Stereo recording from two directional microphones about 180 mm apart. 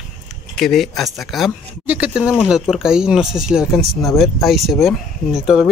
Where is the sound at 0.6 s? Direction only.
Centre (ahead or behind).